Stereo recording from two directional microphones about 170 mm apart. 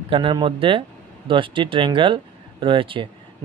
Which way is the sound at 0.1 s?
30° right (ahead or behind).